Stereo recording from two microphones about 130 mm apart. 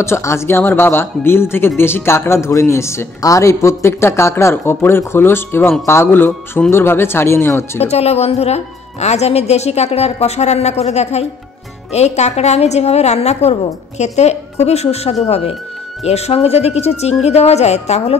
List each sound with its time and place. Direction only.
0.0 s speech: 20° left (ahead or behind)
7.8 s a woman's voice: 55° left (ahead or behind)